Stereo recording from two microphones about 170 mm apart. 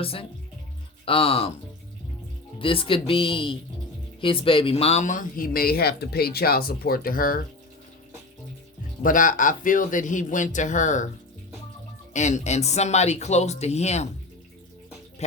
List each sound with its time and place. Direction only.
0.0 s speech: 35° left (ahead or behind)
2.6 s speech: 30° left (ahead or behind); by 7.4 s 55° left (ahead or behind)
9.0 s speech: 50° left (ahead or behind)
12.1 s speech: 45° left (ahead or behind)